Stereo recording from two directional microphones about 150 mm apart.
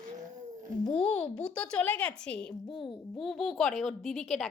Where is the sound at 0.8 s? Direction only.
40° left (ahead or behind).